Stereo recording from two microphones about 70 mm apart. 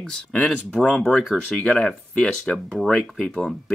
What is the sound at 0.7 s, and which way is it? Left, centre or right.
Speech, centre.